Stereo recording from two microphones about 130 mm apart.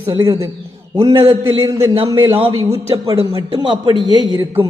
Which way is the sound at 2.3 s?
45° right (ahead or behind).